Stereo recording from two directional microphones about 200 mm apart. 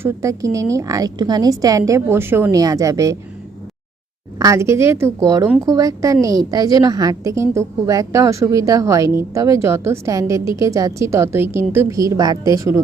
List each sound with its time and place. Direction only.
0.0 s a woman's voice: 15° right (ahead or behind)
4.4 s a woman's voice: 15° right (ahead or behind)